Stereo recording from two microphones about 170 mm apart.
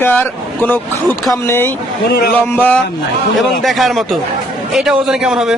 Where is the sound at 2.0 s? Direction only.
65° left (ahead or behind).